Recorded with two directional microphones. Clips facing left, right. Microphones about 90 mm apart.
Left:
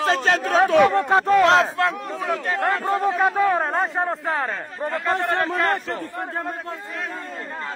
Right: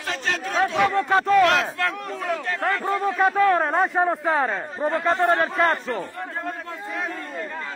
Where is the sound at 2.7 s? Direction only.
20° left (ahead or behind); by 4.1 s centre (ahead or behind).